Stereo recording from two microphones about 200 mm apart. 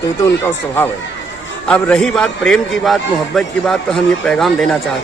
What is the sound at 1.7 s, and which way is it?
Speech, 5° left (ahead or behind).